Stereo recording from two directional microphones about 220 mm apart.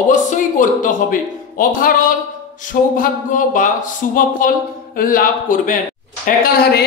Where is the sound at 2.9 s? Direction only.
40° left (ahead or behind).